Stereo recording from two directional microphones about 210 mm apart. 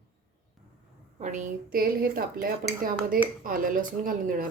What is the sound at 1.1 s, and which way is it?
A woman's voice, 35° right (ahead or behind).